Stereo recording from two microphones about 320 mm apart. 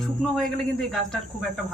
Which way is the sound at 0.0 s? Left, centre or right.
Centre.